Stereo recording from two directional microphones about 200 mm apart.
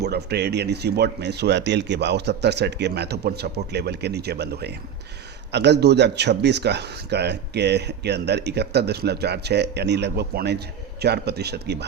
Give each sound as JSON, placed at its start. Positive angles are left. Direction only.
{"t": 0.0, "sound": "speech", "side_deg": -55}